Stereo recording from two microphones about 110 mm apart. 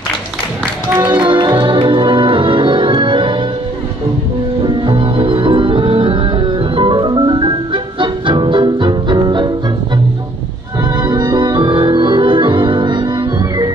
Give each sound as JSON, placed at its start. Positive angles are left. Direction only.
{"t": 1.2, "sound": "music", "side_deg": -50}
{"t": 4.6, "sound": "music", "side_deg": -50}
{"t": 10.8, "sound": "music", "side_deg": -40}